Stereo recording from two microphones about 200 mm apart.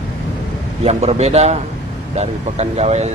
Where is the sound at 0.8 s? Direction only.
30° right (ahead or behind).